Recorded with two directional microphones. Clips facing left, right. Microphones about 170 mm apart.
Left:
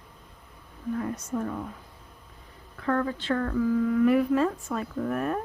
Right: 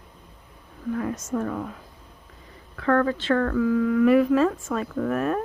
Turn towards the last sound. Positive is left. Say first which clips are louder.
# right 4 dB
turn(degrees=-90)